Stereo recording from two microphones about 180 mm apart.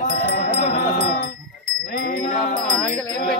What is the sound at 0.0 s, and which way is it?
Music, 40° left (ahead or behind).